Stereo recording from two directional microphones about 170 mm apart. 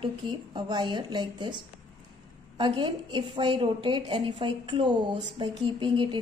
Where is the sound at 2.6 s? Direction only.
30° right (ahead or behind).